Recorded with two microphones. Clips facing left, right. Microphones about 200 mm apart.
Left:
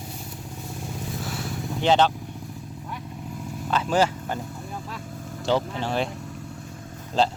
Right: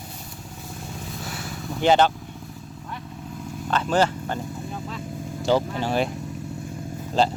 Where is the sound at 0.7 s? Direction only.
Centre (ahead or behind).